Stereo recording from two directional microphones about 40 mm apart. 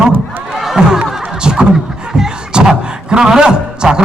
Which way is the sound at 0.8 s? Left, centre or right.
Centre.